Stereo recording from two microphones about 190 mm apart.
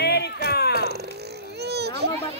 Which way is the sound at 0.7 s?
55° right (ahead or behind).